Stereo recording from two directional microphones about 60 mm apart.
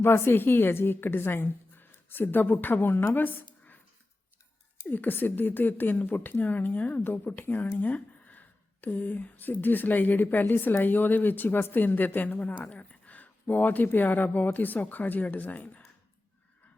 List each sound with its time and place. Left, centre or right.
0.0 s a woman's voice: left
3.1 s a sound: left
4.9 s a woman's voice: left